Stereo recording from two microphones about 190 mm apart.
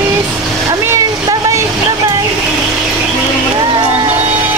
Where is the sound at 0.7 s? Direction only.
15° right (ahead or behind).